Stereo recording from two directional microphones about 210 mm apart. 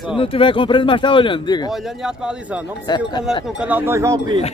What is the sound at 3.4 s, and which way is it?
Speech, 5° right (ahead or behind).